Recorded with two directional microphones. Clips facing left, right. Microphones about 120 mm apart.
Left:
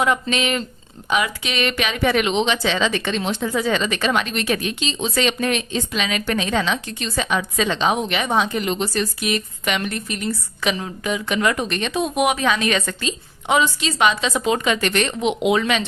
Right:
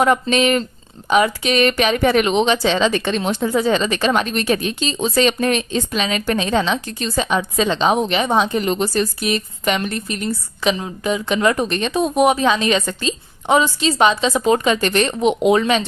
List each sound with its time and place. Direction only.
0.0 s speech: 45° right (ahead or behind)